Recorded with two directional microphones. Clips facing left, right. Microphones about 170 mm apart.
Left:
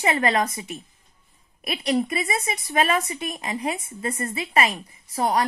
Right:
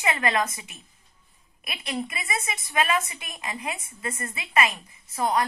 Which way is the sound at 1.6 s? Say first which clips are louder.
Left 8 dB; 40° left (ahead or behind).